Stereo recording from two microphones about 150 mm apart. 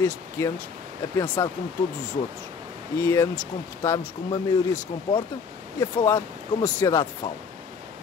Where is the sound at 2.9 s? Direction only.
15° left (ahead or behind).